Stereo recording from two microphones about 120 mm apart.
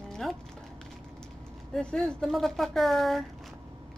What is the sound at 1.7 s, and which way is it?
A woman's voice, 5° left (ahead or behind).